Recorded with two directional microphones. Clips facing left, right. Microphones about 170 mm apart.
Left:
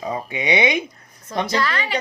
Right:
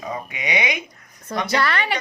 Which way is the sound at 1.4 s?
65° right (ahead or behind).